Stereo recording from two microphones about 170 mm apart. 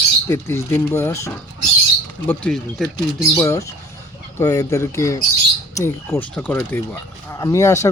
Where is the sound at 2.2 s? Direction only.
5° left (ahead or behind).